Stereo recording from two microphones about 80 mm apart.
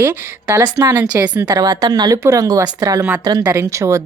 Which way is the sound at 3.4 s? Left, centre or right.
Right.